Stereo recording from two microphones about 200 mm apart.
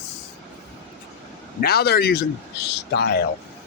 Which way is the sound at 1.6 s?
50° left (ahead or behind).